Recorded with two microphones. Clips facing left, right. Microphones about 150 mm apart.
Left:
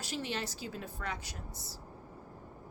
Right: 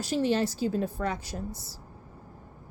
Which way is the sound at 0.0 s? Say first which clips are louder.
Right 12 dB; 35° right (ahead or behind).